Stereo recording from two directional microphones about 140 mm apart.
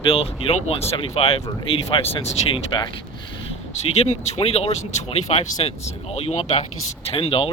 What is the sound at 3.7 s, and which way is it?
Speech, 50° left (ahead or behind).